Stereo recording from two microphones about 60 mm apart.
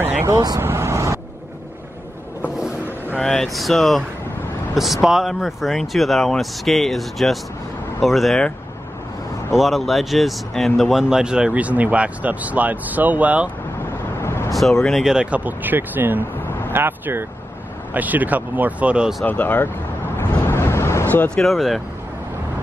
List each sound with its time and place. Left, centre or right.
0.3 s speech: right
0.6 s vehicle: right
3.2 s speech: centre
9.5 s speech: centre
11.1 s speech: centre
11.5 s speech: right
14.2 s vehicle: left
14.5 s speech: centre
15.0 s speech: centre
15.3 s speech: right
19.2 s speech: left
20.2 s vehicle: left
21.4 s speech: centre